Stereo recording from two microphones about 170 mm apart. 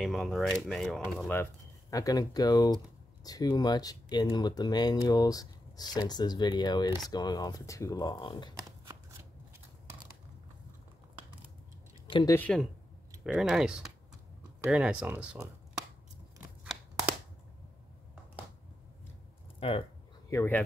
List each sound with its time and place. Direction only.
0.0 s speech: centre (ahead or behind); by 8.5 s 25° left (ahead or behind)
12.1 s speech: 25° left (ahead or behind)
12.4 s speech: 5° left (ahead or behind); by 15.5 s 10° right (ahead or behind)
19.6 s speech: 35° left (ahead or behind)
20.2 s speech: 15° left (ahead or behind)